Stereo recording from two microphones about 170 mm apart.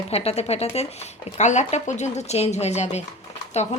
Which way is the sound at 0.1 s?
35° left (ahead or behind).